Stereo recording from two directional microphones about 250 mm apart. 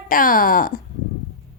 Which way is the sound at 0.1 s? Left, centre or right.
Left.